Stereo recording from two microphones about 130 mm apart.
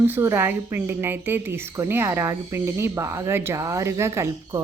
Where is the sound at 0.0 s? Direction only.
15° right (ahead or behind).